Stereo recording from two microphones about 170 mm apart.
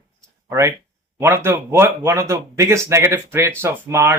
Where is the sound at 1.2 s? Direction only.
15° right (ahead or behind).